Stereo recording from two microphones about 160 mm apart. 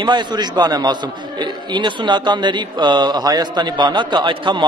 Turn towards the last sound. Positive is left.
turn(degrees=-30)  # may be behind; listen again after turning